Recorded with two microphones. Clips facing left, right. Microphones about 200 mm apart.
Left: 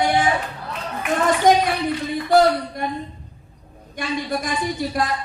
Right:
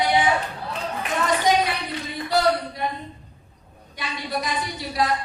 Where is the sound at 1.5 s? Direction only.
50° left (ahead or behind).